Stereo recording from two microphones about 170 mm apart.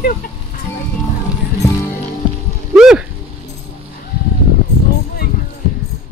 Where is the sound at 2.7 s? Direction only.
5° right (ahead or behind).